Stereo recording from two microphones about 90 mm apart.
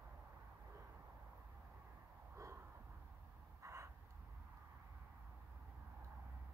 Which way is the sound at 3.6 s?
30° right (ahead or behind).